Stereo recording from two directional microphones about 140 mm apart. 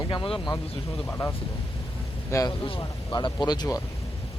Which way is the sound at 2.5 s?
40° left (ahead or behind).